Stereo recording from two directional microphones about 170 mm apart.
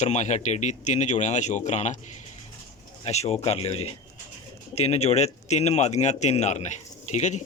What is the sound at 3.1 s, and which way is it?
A man's voice, 40° left (ahead or behind).